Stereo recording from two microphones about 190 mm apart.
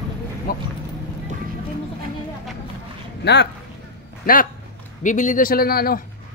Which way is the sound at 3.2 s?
60° left (ahead or behind).